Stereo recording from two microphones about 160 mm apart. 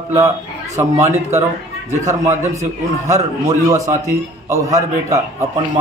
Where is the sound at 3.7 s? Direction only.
20° right (ahead or behind).